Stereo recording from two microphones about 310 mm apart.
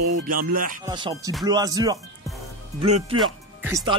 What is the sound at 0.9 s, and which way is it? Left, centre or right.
Speech, centre.